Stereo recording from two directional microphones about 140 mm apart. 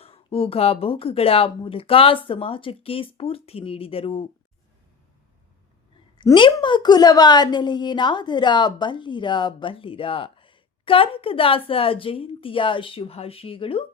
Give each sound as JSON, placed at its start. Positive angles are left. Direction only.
{"t": 0.0, "sound": "a woman's voice", "side_deg": 40}
{"t": 6.1, "sound": "a woman's voice", "side_deg": 35}